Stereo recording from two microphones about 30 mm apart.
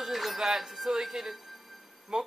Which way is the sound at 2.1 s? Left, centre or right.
Right.